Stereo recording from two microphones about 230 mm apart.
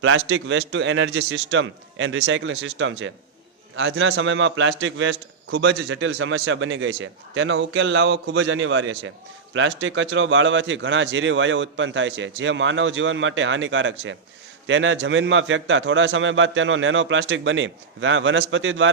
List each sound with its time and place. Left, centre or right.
0.0 s a man's voice: right